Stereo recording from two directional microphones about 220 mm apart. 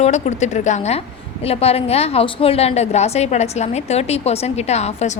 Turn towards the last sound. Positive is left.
turn(degrees=30)  # may be behind; listen again after turning